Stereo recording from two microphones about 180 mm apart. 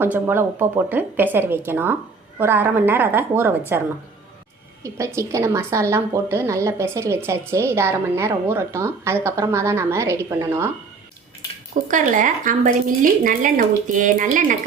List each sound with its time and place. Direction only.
0.0 s a woman's voice: 10° right (ahead or behind)
11.7 s speech: 45° right (ahead or behind)